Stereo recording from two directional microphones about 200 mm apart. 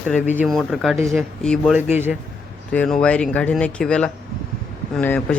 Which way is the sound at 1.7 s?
10° right (ahead or behind).